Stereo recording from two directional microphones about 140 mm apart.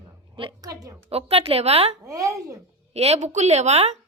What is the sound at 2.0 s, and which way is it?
Speech, 25° right (ahead or behind).